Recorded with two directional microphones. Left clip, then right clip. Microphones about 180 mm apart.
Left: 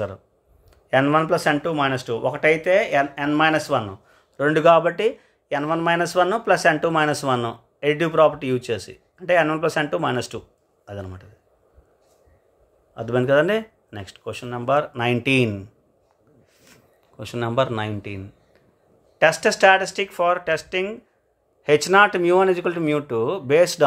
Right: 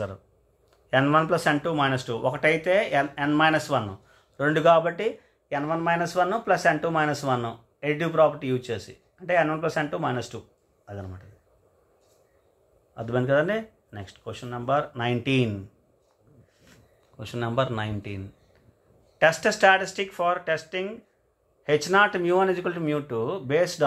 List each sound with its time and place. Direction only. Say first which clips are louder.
0.8 s speech: left 3 dB; 15° left (ahead or behind); by 11.2 s 40° left (ahead or behind)
12.9 s speech: left 5 dB; 30° left (ahead or behind)
16.6 s speech: left 4 dB; 30° left (ahead or behind)